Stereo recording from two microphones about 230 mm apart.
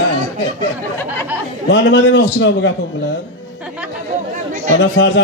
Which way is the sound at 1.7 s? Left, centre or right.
Left.